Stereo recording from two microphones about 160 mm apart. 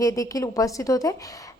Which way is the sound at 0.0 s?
20° left (ahead or behind).